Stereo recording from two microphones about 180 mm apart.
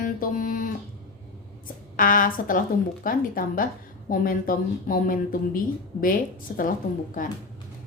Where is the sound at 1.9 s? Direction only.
50° left (ahead or behind).